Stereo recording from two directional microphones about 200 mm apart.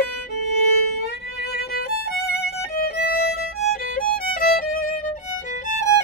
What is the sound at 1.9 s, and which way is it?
Violin, 50° left (ahead or behind).